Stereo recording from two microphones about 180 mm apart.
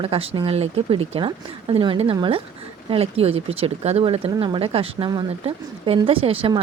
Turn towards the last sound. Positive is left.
turn(degrees=-30)  # may be behind; listen again after turning